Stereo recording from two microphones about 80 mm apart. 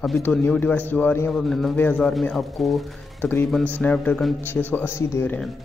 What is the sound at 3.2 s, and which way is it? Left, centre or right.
A man's voice, left.